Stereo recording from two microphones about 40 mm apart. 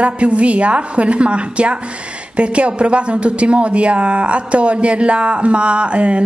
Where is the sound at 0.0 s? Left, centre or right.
Right.